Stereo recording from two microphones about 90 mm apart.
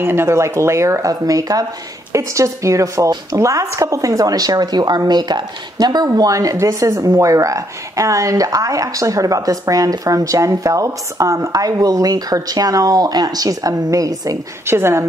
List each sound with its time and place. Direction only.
0.0 s a woman's voice: 25° right (ahead or behind); by 6.0 s 55° right (ahead or behind)
6.1 s speech: 40° right (ahead or behind)
14.7 s speech: 30° right (ahead or behind)